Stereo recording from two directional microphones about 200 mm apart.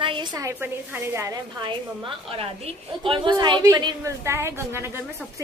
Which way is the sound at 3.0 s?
25° right (ahead or behind).